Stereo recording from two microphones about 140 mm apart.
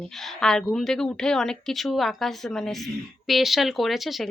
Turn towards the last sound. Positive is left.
turn(degrees=0)  # may be behind; listen again after turning